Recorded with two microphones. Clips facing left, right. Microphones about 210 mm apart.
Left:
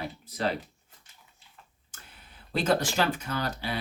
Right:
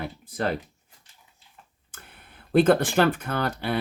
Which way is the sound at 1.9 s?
55° right (ahead or behind).